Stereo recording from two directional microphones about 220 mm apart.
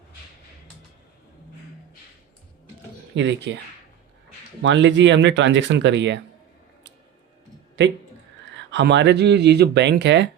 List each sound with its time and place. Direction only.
3.2 s speech: 55° right (ahead or behind)
4.6 s speech: 55° right (ahead or behind)
8.7 s speech: 55° right (ahead or behind)